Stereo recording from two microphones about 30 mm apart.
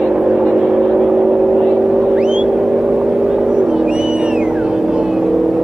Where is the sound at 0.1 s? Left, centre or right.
Right.